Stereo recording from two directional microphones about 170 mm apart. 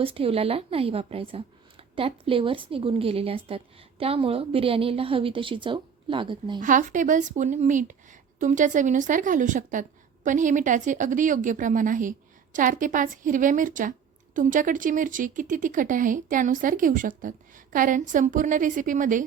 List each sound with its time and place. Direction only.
0.0 s a woman's voice: 35° right (ahead or behind)
6.6 s speech: 50° right (ahead or behind)